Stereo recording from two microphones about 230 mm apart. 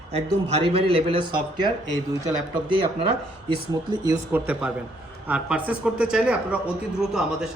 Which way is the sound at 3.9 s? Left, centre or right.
Centre.